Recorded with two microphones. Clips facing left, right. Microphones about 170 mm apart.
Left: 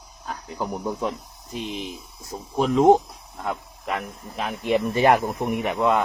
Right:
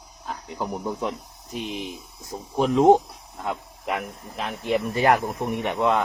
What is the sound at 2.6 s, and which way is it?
Speech, centre (ahead or behind).